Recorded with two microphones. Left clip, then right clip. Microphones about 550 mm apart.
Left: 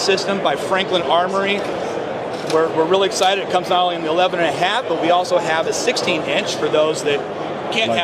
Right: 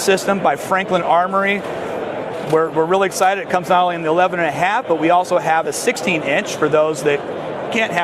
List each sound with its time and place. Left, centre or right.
0.0 s speech: right
2.6 s speech: right